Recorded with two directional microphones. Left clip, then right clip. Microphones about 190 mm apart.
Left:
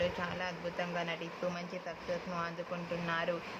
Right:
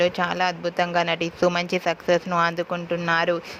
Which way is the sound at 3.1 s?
55° right (ahead or behind).